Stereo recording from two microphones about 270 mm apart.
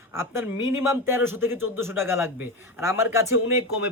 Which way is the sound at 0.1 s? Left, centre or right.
Centre.